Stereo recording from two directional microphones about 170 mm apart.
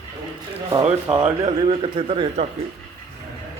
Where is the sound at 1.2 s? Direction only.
35° right (ahead or behind).